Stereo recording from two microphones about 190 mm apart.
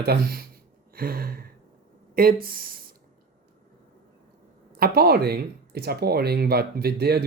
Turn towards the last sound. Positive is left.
turn(degrees=-55)  # may be behind; listen again after turning